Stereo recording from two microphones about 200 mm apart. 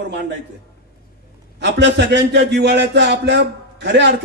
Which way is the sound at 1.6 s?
60° right (ahead or behind).